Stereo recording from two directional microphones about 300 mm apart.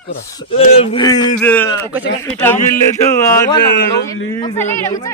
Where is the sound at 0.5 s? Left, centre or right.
Centre.